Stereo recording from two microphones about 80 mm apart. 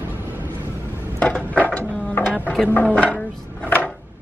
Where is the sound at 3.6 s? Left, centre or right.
Left.